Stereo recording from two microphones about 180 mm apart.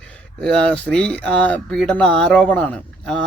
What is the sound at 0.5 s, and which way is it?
Speech, 5° left (ahead or behind).